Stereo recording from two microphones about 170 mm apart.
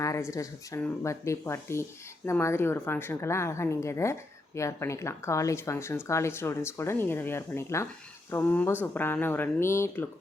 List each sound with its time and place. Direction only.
0.0 s a woman's voice: 15° left (ahead or behind)